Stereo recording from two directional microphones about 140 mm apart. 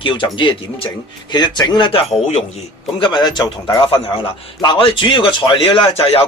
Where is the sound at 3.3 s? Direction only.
30° left (ahead or behind).